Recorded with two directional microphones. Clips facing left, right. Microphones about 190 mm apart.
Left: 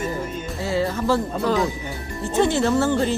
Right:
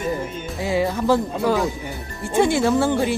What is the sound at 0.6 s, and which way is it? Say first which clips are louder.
Speech: right 2 dB; 15° right (ahead or behind).